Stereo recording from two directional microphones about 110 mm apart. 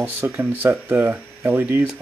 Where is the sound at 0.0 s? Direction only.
20° right (ahead or behind).